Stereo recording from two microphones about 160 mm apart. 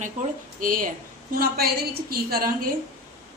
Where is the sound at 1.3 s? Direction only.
70° right (ahead or behind).